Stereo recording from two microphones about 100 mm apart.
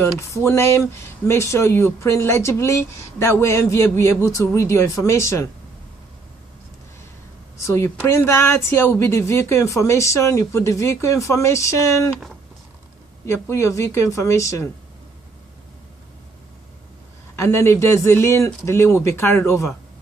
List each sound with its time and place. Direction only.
0.3 s speech: 30° left (ahead or behind)
7.6 s speech: 30° left (ahead or behind)
13.2 s speech: 30° left (ahead or behind)
17.4 s speech: 25° left (ahead or behind)